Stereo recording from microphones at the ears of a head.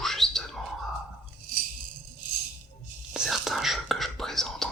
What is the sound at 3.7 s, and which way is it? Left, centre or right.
Whispering, centre.